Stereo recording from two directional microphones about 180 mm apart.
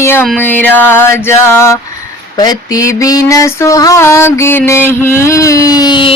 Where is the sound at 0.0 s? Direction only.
15° left (ahead or behind).